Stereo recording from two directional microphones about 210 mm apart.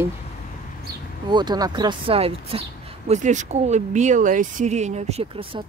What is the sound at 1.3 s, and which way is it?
Speech, 20° right (ahead or behind).